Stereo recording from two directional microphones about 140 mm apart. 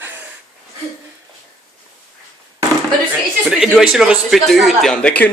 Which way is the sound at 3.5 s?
Centre (ahead or behind).